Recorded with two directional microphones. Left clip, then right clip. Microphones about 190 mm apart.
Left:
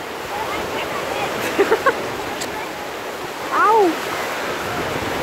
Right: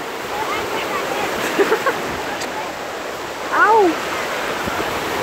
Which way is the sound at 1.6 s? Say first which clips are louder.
Even; 15° left (ahead or behind).